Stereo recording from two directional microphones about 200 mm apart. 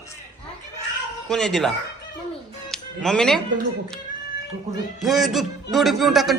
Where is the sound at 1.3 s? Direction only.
Centre (ahead or behind).